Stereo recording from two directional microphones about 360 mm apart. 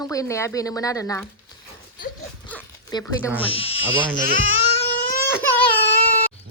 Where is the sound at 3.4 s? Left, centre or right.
Centre.